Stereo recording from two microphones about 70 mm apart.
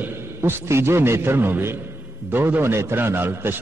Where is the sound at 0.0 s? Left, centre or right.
Right.